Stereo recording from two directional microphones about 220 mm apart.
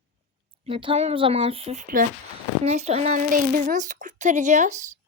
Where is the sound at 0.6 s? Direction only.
25° right (ahead or behind).